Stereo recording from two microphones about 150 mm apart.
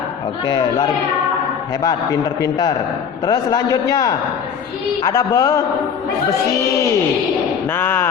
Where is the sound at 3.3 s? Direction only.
25° left (ahead or behind).